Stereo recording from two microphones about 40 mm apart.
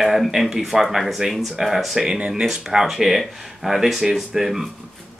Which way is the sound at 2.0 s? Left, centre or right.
Centre.